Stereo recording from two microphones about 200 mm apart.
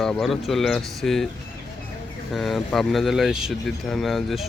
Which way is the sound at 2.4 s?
Centre (ahead or behind).